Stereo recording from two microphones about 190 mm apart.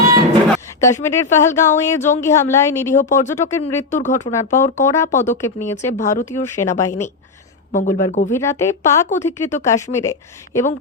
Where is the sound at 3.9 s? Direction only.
40° left (ahead or behind).